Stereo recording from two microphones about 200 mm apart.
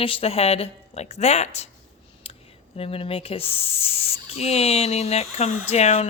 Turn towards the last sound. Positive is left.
turn(degrees=30)  # may be behind; listen again after turning